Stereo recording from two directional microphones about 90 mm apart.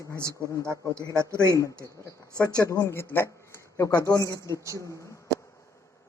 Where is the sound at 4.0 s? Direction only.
40° left (ahead or behind).